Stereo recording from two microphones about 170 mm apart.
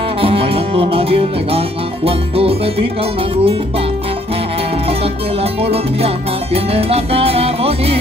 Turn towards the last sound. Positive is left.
turn(degrees=-35)  # may be behind; listen again after turning